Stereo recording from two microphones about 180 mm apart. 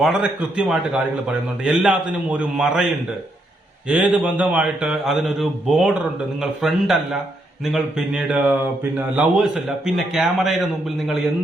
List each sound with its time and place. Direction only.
0.0 s speech: 5° right (ahead or behind)
3.8 s speech: 5° right (ahead or behind)